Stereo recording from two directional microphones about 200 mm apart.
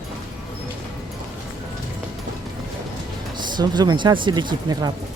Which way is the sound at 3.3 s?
20° right (ahead or behind).